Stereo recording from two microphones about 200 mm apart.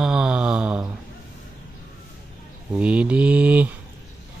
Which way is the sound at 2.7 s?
5° right (ahead or behind).